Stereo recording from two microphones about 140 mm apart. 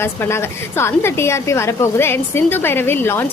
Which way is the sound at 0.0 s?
20° left (ahead or behind).